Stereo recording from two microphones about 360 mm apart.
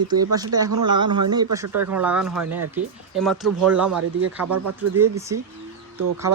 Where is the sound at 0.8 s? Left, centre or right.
Centre.